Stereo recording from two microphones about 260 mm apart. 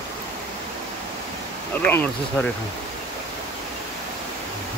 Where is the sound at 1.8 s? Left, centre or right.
Centre.